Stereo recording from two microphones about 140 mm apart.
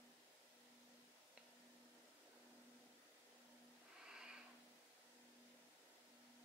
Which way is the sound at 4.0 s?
5° right (ahead or behind).